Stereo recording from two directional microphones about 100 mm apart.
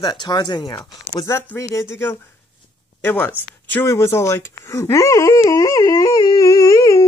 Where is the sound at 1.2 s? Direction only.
25° left (ahead or behind).